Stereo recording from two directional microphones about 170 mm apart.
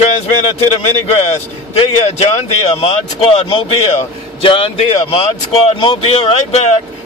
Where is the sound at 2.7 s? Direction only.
35° left (ahead or behind).